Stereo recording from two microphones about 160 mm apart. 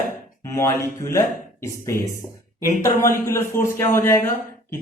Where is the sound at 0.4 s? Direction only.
20° left (ahead or behind).